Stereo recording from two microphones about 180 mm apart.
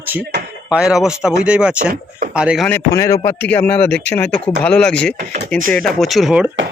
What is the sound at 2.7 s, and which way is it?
A man's voice, 20° left (ahead or behind).